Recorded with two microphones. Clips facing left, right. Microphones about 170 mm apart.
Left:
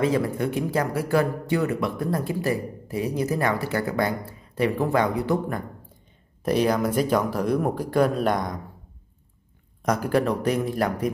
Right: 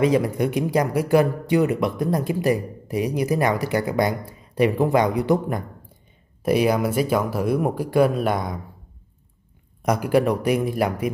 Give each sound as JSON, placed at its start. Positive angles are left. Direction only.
{"t": 0.0, "sound": "speech", "side_deg": -15}
{"t": 9.8, "sound": "speech", "side_deg": -10}